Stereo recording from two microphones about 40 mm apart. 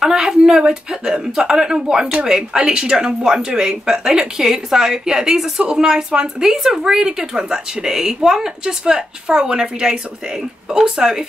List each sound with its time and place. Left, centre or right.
0.0 s a woman's voice: centre